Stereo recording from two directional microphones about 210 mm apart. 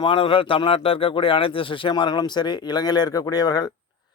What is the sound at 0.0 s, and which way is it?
A man's voice, 25° left (ahead or behind).